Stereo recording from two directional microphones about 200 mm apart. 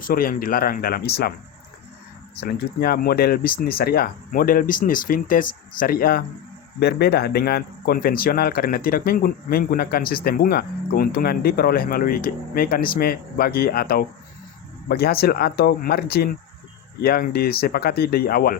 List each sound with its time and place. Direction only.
0.1 s speech: 45° left (ahead or behind)
2.4 s speech: 50° left (ahead or behind)